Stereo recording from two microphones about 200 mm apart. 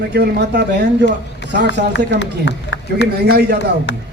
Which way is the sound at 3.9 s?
60° left (ahead or behind).